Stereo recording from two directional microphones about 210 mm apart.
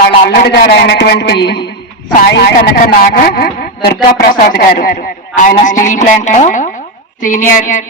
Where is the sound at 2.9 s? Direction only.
45° left (ahead or behind).